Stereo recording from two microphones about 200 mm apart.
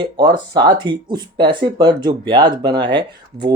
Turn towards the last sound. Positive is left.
turn(degrees=-20)  # may be behind; listen again after turning